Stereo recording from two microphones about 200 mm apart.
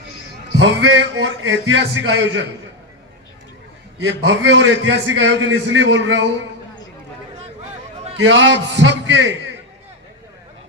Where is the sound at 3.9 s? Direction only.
60° right (ahead or behind).